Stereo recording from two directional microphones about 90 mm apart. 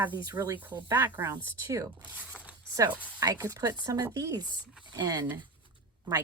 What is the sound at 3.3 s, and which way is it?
Speech, 35° right (ahead or behind).